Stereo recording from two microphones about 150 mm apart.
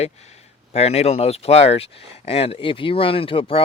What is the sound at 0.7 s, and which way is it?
Speech, 45° left (ahead or behind).